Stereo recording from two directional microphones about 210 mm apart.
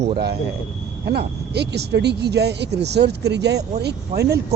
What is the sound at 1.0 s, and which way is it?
Speech, 50° right (ahead or behind).